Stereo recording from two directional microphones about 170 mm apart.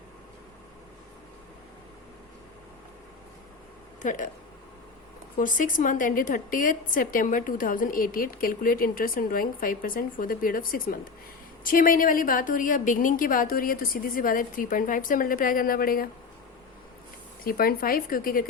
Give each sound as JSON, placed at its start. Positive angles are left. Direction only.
{"t": 4.0, "sound": "speech", "side_deg": 50}
{"t": 5.4, "sound": "a woman's voice", "side_deg": 50}
{"t": 17.4, "sound": "a woman's voice", "side_deg": 60}